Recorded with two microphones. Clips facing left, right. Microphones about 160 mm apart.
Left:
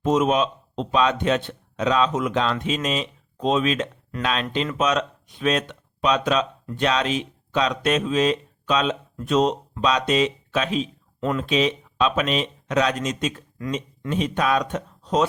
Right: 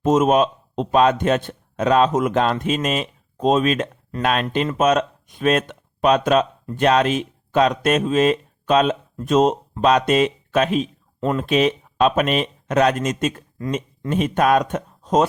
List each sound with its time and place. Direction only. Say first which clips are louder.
0.0 s a man's voice: right 4 dB; 45° right (ahead or behind)
11.2 s speech: right 3 dB; 35° right (ahead or behind)
11.4 s a man's voice: right 4 dB; 50° right (ahead or behind)